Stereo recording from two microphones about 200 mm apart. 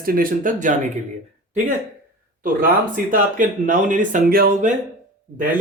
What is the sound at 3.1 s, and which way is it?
Speech, 40° right (ahead or behind).